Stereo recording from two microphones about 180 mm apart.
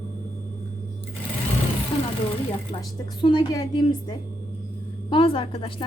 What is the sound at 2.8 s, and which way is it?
A woman's voice, 25° left (ahead or behind).